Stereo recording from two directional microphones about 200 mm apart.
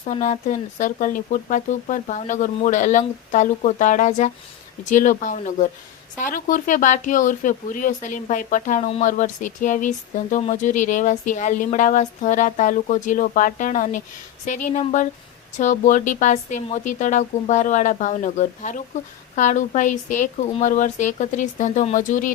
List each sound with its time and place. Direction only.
0.0 s speech: 35° left (ahead or behind)